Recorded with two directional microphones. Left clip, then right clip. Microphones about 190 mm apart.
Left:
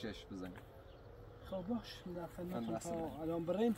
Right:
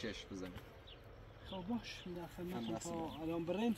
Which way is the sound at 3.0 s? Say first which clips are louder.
Left 1 dB; 30° left (ahead or behind).